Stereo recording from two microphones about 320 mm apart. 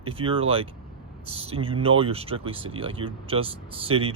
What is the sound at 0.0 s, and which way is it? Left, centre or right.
Speech, centre.